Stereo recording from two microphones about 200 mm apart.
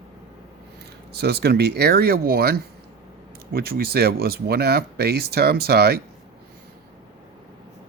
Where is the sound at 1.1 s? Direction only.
55° right (ahead or behind).